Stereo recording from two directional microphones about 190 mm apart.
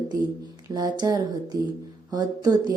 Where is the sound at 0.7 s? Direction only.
20° right (ahead or behind).